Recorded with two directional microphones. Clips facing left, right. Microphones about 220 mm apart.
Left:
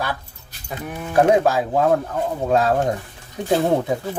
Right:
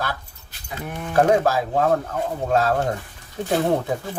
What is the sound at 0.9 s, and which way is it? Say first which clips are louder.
Speech: left 2 dB; 5° left (ahead or behind).